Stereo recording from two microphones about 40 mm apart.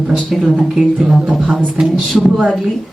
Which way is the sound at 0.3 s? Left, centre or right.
Centre.